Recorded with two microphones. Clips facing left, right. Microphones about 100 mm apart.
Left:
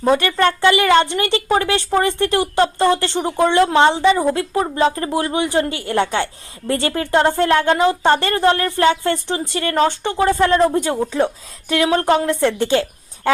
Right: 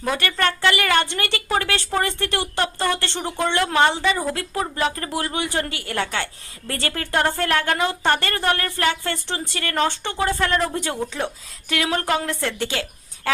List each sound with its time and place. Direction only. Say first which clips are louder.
0.2 s a woman's voice: left 6 dB; 20° left (ahead or behind)